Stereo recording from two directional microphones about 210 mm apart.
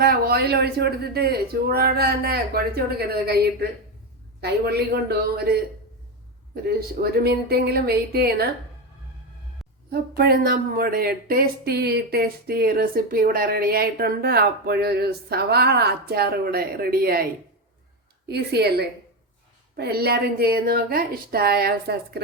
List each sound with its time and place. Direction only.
0.0 s speech: 45° right (ahead or behind)
6.7 s speech: 45° right (ahead or behind)
9.9 s speech: 45° right (ahead or behind)
18.3 s speech: 50° right (ahead or behind)